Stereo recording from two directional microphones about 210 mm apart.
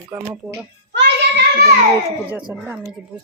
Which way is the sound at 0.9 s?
50° right (ahead or behind).